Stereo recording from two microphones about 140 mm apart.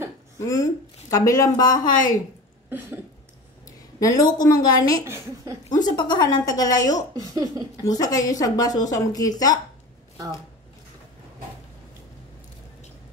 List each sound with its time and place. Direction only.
0.4 s speech: 20° left (ahead or behind)
1.9 s a woman's voice: 70° left (ahead or behind)
2.7 s cough: 15° right (ahead or behind)
3.6 s speech: 25° left (ahead or behind)
5.0 s speech: 20° right (ahead or behind)
5.7 s speech: 30° left (ahead or behind)
7.2 s speech: 25° right (ahead or behind)
7.8 s speech: 25° left (ahead or behind)